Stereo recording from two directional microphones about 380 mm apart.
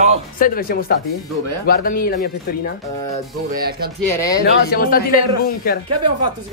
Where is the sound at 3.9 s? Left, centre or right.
Centre.